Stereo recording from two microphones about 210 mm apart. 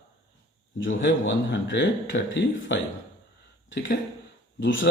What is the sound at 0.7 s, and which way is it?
A man's voice, 60° left (ahead or behind).